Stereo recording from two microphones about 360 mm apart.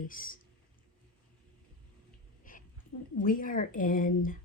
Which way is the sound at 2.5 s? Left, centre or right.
Left.